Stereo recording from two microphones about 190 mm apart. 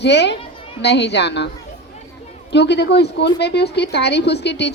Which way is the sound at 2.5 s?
65° left (ahead or behind).